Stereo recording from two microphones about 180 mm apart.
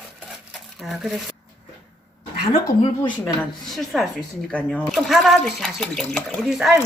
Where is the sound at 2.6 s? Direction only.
20° left (ahead or behind).